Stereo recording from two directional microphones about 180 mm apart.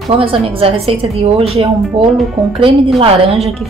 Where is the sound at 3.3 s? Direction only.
Centre (ahead or behind).